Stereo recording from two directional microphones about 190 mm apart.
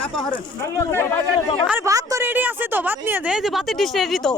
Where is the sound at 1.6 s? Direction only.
10° right (ahead or behind).